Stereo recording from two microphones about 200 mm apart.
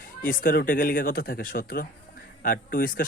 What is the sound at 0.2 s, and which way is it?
Speech, 45° left (ahead or behind).